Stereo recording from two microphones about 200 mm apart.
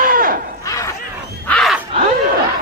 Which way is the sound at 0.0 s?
45° right (ahead or behind).